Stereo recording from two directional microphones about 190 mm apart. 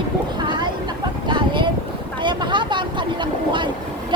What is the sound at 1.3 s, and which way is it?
Speech, 25° right (ahead or behind).